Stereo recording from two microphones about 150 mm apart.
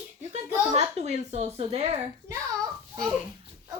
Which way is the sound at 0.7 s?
45° right (ahead or behind).